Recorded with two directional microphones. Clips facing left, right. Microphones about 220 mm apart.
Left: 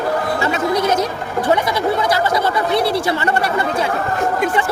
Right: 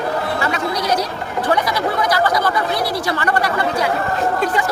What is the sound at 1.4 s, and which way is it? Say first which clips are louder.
Speech: left 2 dB; 25° left (ahead or behind).